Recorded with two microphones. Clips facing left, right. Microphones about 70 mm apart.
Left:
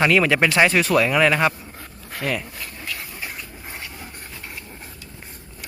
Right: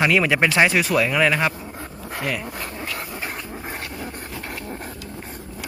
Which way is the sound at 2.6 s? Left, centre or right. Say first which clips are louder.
Right 4 dB; right.